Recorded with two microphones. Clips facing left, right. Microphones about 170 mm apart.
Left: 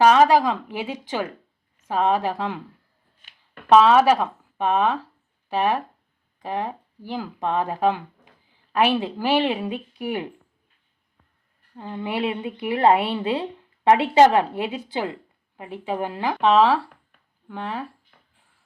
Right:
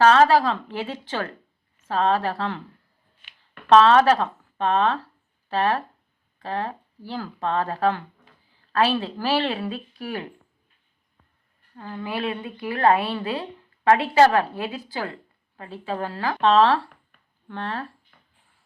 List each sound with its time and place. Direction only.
0.0 s speech: 15° left (ahead or behind)
3.7 s speech: 10° left (ahead or behind)
11.8 s a woman's voice: 20° left (ahead or behind)